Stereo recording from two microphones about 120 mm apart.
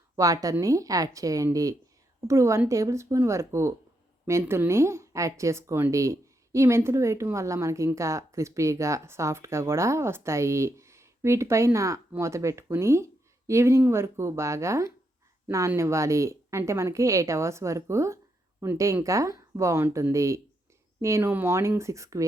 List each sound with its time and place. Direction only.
0.2 s speech: 25° right (ahead or behind)